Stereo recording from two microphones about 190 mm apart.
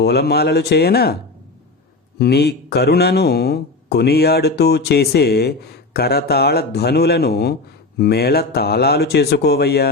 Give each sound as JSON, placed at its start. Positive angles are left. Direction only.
{"t": 0.0, "sound": "speech", "side_deg": 60}
{"t": 2.1, "sound": "speech", "side_deg": 55}